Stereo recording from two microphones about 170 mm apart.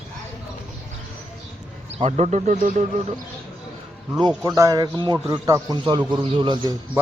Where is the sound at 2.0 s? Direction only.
45° right (ahead or behind).